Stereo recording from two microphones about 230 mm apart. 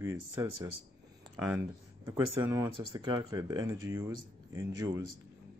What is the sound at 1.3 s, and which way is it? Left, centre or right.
Speech, centre.